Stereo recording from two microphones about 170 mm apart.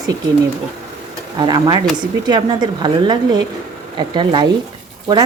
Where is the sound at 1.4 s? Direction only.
25° right (ahead or behind).